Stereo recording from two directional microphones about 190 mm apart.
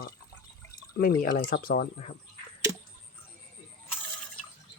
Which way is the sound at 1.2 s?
50° left (ahead or behind).